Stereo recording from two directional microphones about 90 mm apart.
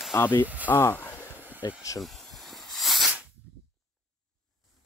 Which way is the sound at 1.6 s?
45° left (ahead or behind).